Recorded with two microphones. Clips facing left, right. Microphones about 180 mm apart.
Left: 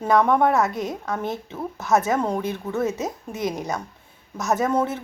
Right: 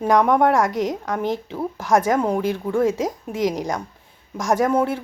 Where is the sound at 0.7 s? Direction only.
90° right.